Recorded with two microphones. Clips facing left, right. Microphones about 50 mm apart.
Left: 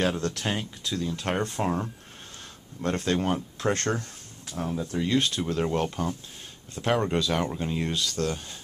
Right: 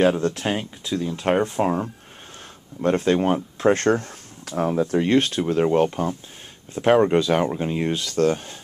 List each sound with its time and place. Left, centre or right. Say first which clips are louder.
0.0 s speech: right 7 dB; centre; by 5.4 s right
5.4 s speech: right 8 dB; right
6.7 s speech: right 9 dB; right
8.0 s speech: right 8 dB; right